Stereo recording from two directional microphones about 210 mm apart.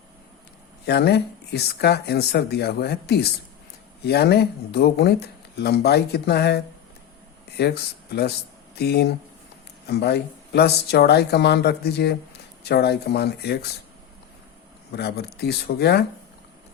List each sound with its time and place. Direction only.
0.9 s speech: 50° left (ahead or behind)
14.9 s speech: 50° left (ahead or behind)